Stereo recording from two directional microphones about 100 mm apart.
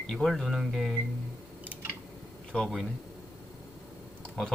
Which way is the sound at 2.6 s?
Centre (ahead or behind).